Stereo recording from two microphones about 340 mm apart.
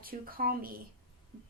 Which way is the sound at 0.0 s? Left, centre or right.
Right.